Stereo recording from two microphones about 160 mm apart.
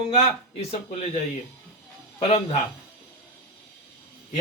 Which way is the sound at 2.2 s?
40° left (ahead or behind).